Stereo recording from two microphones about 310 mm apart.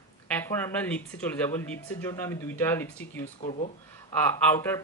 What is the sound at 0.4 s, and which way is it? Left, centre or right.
Speech, centre.